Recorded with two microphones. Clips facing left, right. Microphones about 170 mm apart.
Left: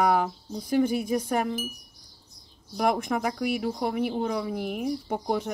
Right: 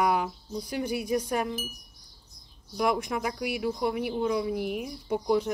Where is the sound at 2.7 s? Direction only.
50° left (ahead or behind).